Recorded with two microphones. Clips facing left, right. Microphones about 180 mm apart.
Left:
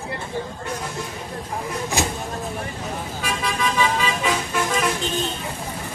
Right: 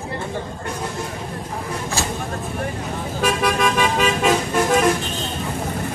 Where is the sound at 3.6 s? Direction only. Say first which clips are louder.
Even; 50° right (ahead or behind).